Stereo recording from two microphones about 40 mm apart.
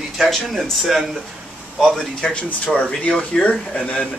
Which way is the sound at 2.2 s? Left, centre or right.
Left.